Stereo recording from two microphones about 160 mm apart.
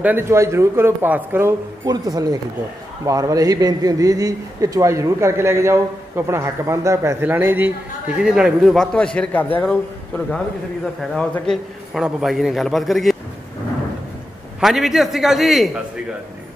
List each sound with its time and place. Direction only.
0.0 s a man's voice: 15° right (ahead or behind)
1.9 s a man's voice: 25° right (ahead or behind); by 13.2 s centre (ahead or behind)
14.6 s a man's voice: centre (ahead or behind)